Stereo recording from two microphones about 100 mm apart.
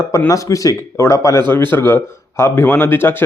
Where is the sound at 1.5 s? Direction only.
20° left (ahead or behind).